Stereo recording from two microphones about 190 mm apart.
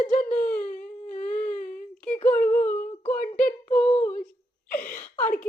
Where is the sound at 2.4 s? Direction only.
40° left (ahead or behind).